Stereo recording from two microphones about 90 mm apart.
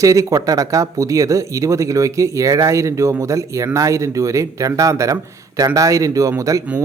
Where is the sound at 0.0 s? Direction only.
35° right (ahead or behind).